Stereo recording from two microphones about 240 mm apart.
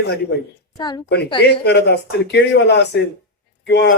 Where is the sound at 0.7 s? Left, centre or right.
Centre.